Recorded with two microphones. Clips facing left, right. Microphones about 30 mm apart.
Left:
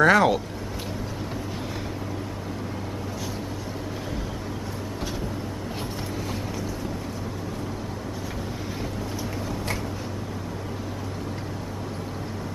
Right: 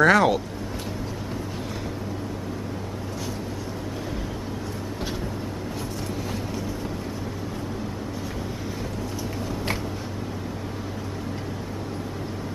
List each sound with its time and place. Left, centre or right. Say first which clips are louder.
0.0 s speech: even; centre